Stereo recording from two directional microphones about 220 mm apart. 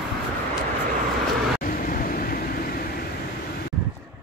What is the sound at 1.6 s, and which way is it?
Vehicle, 40° left (ahead or behind).